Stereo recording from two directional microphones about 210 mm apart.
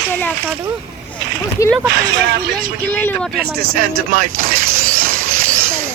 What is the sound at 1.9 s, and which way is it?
Speech, 55° right (ahead or behind).